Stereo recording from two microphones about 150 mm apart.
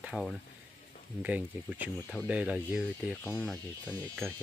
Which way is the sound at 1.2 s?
10° right (ahead or behind).